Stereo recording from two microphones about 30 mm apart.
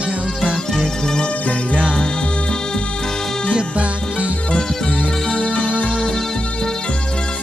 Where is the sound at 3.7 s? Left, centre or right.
Right.